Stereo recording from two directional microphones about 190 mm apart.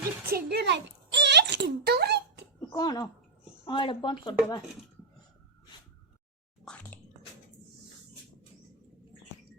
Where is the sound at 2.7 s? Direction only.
20° left (ahead or behind).